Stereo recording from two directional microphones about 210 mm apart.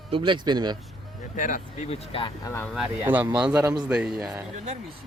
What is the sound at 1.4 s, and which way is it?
Speech, 40° left (ahead or behind).